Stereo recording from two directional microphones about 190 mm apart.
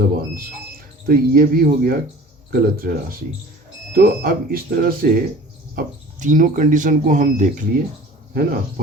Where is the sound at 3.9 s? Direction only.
50° right (ahead or behind).